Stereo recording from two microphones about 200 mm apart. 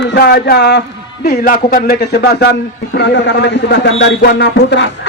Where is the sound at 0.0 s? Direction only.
55° left (ahead or behind).